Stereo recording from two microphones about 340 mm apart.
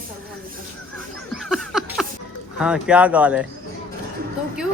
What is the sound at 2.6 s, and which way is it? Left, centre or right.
Speech, centre.